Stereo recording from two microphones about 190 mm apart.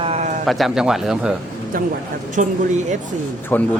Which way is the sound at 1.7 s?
50° right (ahead or behind).